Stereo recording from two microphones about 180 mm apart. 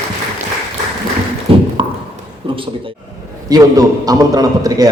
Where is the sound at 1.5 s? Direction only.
30° right (ahead or behind).